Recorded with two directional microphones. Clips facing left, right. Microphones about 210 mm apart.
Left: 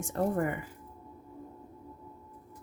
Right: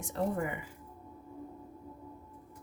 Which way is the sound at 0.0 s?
50° left (ahead or behind).